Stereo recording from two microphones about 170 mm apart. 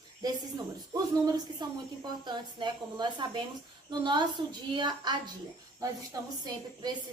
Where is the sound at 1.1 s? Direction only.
25° right (ahead or behind).